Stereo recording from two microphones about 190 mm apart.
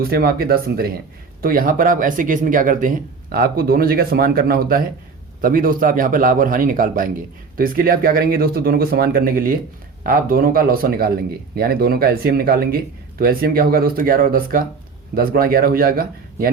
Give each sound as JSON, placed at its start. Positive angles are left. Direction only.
{"t": 0.1, "sound": "speech", "side_deg": -55}